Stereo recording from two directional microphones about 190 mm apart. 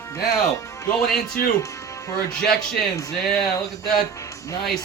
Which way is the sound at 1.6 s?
15° left (ahead or behind).